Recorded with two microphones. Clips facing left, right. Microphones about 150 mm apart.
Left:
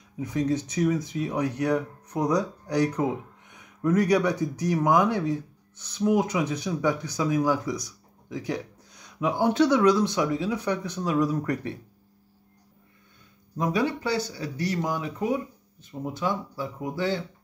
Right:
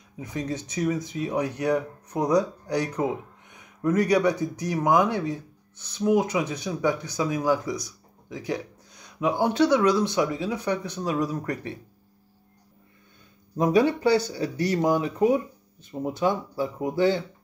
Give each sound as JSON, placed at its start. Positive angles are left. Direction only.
{"t": 0.2, "sound": "speech", "side_deg": 0}
{"t": 13.6, "sound": "speech", "side_deg": -25}